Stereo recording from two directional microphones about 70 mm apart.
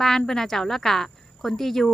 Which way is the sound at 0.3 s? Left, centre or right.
Centre.